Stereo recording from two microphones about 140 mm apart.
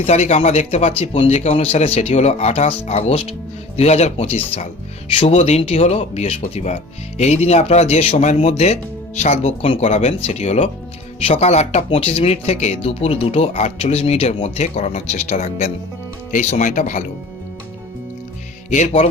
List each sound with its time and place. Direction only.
0.0 s speech: 50° left (ahead or behind)
18.7 s speech: 55° left (ahead or behind)